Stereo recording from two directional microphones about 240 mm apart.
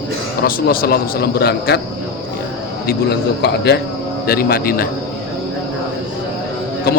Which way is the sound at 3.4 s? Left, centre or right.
Left.